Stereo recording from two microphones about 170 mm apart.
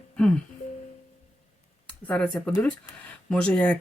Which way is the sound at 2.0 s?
5° left (ahead or behind).